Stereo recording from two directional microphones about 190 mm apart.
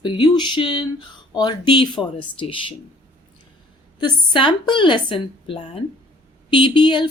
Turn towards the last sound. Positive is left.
turn(degrees=25)  # may be behind; listen again after turning